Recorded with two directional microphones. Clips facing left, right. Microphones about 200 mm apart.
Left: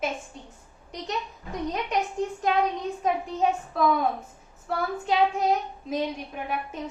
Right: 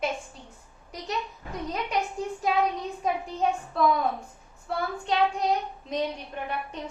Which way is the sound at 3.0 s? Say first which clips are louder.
Left 2 dB; centre (ahead or behind).